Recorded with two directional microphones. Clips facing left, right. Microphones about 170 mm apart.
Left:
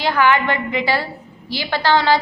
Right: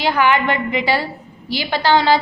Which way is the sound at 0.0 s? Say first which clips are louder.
Even; 15° right (ahead or behind).